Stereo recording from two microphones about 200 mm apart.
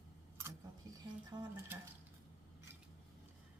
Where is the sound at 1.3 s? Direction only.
20° right (ahead or behind).